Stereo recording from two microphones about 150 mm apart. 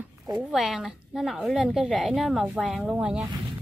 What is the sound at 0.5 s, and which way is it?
A woman's voice, 5° right (ahead or behind).